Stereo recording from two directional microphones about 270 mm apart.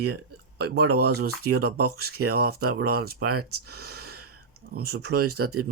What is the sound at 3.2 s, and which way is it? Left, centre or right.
Speech, right.